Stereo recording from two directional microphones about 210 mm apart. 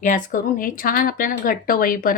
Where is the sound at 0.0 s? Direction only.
40° left (ahead or behind).